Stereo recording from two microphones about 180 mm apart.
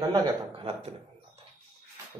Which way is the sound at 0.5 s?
30° right (ahead or behind).